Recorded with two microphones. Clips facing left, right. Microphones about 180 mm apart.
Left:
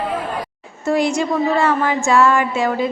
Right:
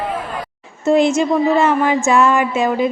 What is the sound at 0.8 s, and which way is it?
A woman's voice, 20° right (ahead or behind).